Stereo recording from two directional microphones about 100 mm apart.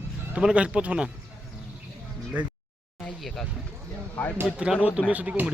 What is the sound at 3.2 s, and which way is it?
A man's voice, 5° left (ahead or behind).